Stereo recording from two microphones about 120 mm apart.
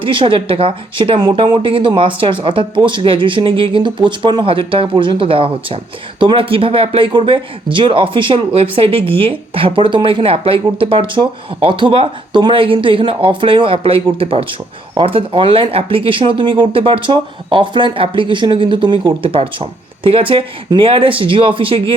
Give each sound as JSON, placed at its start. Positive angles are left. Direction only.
{"t": 0.0, "sound": "a woman's voice", "side_deg": -45}